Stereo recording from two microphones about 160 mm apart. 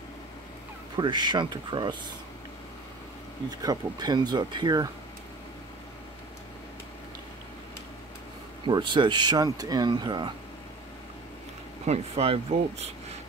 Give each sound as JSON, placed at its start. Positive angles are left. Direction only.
{"t": 0.9, "sound": "speech", "side_deg": -30}
{"t": 3.4, "sound": "speech", "side_deg": -25}
{"t": 8.6, "sound": "speech", "side_deg": -30}
{"t": 11.8, "sound": "speech", "side_deg": -40}